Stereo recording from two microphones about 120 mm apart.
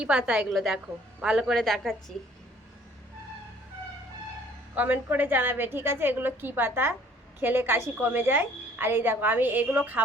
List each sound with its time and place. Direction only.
0.0 s a woman's voice: 10° right (ahead or behind)
4.7 s a woman's voice: 15° right (ahead or behind)